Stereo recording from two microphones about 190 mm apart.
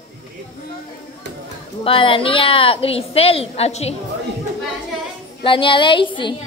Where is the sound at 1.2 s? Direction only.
65° right (ahead or behind).